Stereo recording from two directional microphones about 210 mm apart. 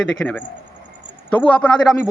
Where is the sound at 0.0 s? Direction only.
5° left (ahead or behind).